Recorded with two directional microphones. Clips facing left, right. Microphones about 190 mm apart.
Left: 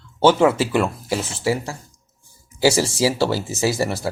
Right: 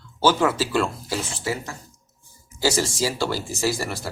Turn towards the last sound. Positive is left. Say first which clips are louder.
# left 4 dB
turn(degrees=25)  # may be behind; listen again after turning